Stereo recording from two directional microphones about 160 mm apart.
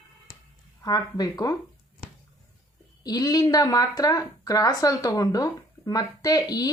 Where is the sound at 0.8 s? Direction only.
25° left (ahead or behind).